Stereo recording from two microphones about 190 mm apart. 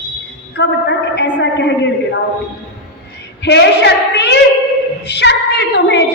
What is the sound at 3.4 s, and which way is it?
A woman's voice, 65° left (ahead or behind).